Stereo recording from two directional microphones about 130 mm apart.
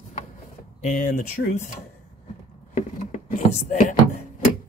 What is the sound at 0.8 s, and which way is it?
Speech, 90° left.